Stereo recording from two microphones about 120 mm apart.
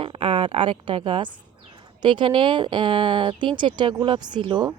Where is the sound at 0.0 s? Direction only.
50° right (ahead or behind).